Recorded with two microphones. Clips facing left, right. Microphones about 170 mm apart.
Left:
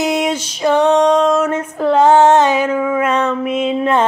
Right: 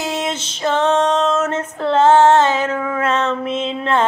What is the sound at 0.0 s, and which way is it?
Music, 15° left (ahead or behind).